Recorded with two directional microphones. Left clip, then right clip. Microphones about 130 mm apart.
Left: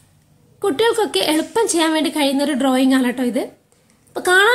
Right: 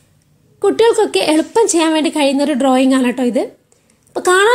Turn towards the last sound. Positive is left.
turn(degrees=-25)  # may be behind; listen again after turning